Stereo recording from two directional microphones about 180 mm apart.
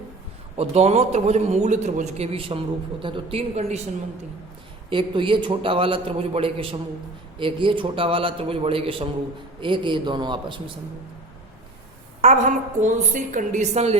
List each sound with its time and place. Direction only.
0.5 s a man's voice: 35° right (ahead or behind)
4.9 s a man's voice: 30° right (ahead or behind)
12.2 s a woman's voice: 40° right (ahead or behind)